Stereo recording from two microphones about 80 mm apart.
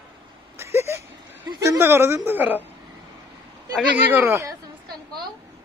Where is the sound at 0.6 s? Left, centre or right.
Right.